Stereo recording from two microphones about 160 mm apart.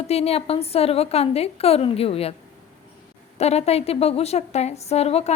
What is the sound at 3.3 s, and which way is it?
A woman's voice, 40° left (ahead or behind).